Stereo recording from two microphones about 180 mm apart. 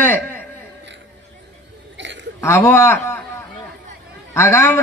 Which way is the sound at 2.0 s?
85° right.